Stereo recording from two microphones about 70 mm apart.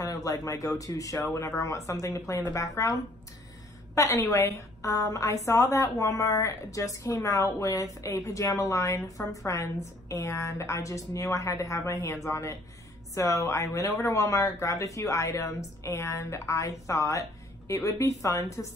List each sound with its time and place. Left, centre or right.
0.0 s a woman's voice: left